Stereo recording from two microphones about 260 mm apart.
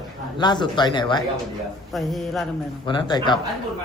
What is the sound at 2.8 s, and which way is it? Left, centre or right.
Speech, centre.